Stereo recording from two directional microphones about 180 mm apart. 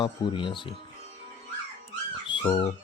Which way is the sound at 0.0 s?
25° left (ahead or behind).